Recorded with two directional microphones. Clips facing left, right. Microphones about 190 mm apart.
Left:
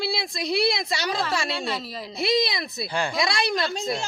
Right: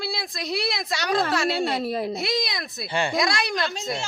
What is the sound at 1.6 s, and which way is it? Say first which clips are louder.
Speech: right 6 dB; 55° right (ahead or behind).